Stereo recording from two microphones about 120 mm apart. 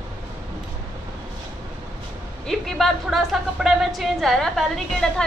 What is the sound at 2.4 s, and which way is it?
A woman's voice, centre (ahead or behind).